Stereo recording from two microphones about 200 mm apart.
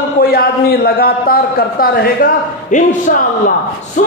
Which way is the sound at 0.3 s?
50° left (ahead or behind).